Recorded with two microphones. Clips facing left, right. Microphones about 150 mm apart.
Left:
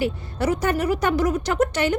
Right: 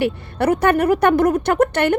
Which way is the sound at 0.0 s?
65° right (ahead or behind).